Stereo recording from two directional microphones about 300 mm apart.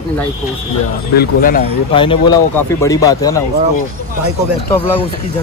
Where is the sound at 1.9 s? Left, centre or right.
Centre.